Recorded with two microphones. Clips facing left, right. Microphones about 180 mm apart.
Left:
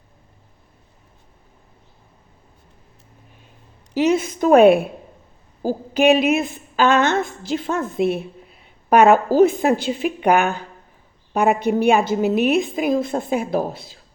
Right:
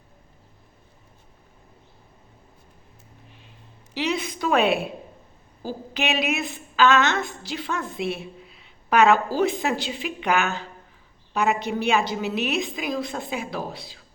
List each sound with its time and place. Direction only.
3.9 s a woman's voice: 45° left (ahead or behind)